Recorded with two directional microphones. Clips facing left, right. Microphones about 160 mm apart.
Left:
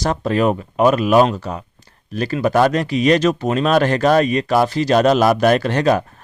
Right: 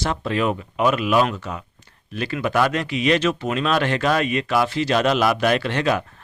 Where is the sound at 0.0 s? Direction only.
40° left (ahead or behind).